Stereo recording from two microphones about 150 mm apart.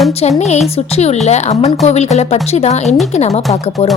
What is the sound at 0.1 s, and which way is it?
A woman's voice, 45° left (ahead or behind).